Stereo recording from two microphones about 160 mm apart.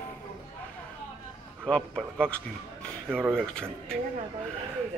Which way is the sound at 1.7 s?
5° left (ahead or behind).